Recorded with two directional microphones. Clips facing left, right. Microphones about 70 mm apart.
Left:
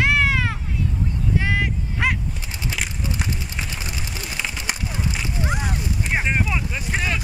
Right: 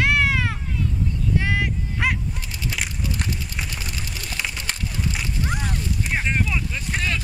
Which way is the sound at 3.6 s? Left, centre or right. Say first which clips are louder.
Left 1 dB; centre.